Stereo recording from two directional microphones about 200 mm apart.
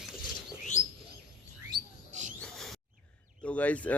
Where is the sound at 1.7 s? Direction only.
20° right (ahead or behind).